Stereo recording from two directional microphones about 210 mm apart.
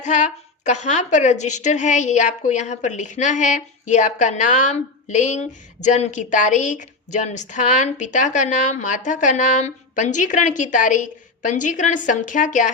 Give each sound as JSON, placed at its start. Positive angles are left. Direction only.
{"t": 0.0, "sound": "a woman's voice", "side_deg": 35}